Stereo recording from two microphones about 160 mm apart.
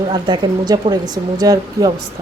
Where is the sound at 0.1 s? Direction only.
30° right (ahead or behind).